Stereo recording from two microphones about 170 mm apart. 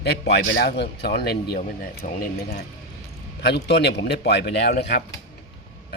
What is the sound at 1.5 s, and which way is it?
Speech, 55° left (ahead or behind).